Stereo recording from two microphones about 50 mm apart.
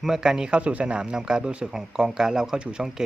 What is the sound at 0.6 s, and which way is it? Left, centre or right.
Speech, right.